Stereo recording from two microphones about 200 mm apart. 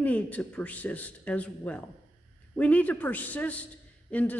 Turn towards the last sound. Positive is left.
turn(degrees=5)  # may be behind; listen again after turning